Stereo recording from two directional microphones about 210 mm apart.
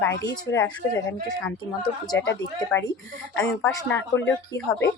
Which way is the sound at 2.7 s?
10° left (ahead or behind).